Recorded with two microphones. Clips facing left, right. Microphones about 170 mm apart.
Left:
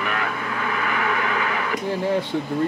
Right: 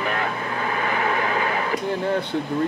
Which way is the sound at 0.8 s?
30° right (ahead or behind).